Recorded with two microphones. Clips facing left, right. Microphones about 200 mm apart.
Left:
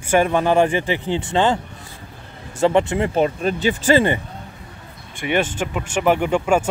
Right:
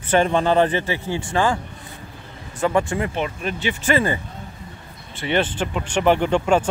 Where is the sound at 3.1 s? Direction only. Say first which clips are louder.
Left 7 dB; 35° left (ahead or behind).